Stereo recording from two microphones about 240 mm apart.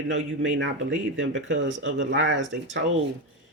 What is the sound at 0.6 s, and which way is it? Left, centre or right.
Speech, right.